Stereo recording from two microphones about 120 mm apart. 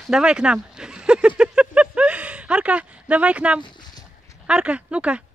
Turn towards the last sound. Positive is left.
turn(degrees=-10)  # may be behind; listen again after turning